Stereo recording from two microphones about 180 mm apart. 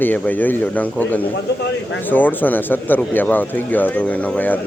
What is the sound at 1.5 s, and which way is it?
Speech, 70° left (ahead or behind).